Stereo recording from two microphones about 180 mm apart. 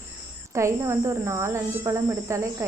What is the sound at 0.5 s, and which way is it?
Speech, 15° right (ahead or behind).